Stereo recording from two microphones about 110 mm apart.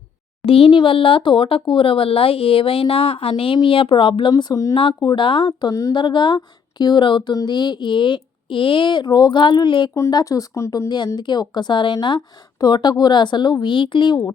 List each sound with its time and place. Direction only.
0.4 s speech: 60° left (ahead or behind); by 4.8 s 35° left (ahead or behind)
5.0 s speech: 50° left (ahead or behind)
5.9 s speech: 45° left (ahead or behind)
9.9 s speech: 35° left (ahead or behind)